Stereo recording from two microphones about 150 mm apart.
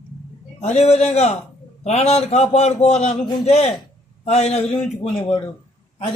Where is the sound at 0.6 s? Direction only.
45° left (ahead or behind).